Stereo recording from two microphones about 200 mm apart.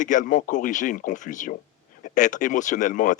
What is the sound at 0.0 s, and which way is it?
Speech, 40° left (ahead or behind).